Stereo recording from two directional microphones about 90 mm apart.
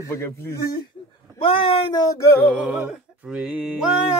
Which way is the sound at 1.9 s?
45° left (ahead or behind).